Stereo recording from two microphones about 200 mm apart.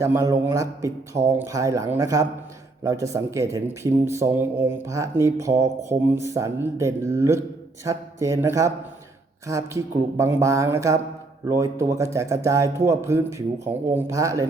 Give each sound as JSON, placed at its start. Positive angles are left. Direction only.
{"t": 0.0, "sound": "speech", "side_deg": -15}